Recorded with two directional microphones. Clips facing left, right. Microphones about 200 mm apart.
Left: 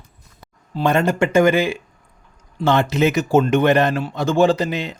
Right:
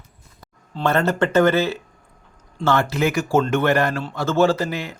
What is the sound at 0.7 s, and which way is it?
A man's voice, 15° left (ahead or behind).